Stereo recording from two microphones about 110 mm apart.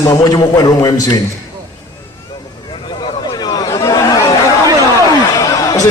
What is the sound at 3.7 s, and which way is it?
Chatter, 30° left (ahead or behind).